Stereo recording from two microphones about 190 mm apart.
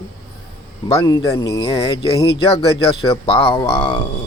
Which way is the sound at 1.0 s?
20° left (ahead or behind).